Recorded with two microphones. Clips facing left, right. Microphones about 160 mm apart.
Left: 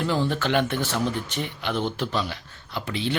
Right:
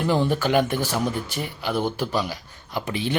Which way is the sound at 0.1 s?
15° right (ahead or behind).